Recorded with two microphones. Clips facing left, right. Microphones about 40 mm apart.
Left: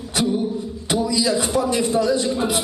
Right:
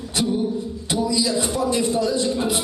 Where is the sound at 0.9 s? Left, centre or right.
Left.